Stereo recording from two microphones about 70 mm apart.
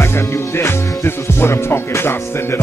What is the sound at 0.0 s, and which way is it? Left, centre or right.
Music, left.